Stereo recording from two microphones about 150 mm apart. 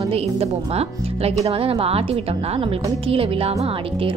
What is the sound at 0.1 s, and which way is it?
Speech, 40° right (ahead or behind).